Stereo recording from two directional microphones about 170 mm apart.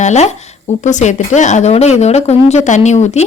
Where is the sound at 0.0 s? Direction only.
40° left (ahead or behind).